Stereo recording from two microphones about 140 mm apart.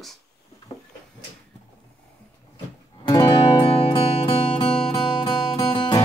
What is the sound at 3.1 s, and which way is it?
Music, 35° left (ahead or behind).